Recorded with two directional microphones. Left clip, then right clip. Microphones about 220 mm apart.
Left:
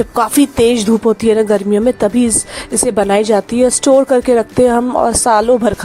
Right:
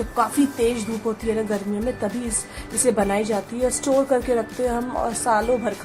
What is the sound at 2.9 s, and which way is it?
A woman's voice, 45° left (ahead or behind).